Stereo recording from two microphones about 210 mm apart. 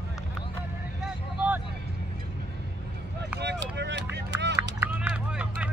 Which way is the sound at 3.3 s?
55° right (ahead or behind).